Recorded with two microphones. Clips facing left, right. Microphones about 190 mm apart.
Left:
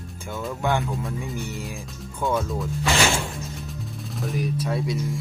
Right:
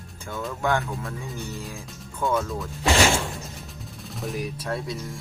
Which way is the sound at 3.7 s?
Centre (ahead or behind).